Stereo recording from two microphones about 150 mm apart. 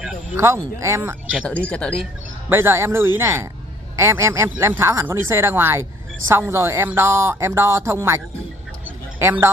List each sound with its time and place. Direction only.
0.0 s a sound: 5° right (ahead or behind)
0.4 s speech: 20° right (ahead or behind)
1.7 s speech: 10° left (ahead or behind)
2.5 s speech: 15° right (ahead or behind)
9.2 s speech: 15° right (ahead or behind)